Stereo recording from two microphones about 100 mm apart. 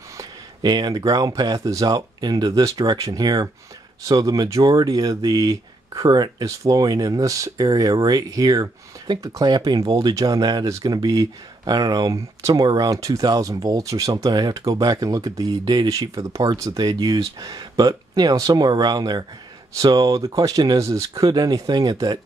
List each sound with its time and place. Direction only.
0.2 s speech: 45° right (ahead or behind)